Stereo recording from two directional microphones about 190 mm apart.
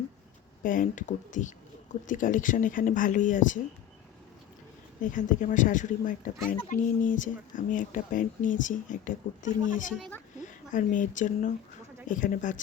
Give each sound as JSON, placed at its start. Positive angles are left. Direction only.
{"t": 0.6, "sound": "speech", "side_deg": 45}
{"t": 5.0, "sound": "speech", "side_deg": 40}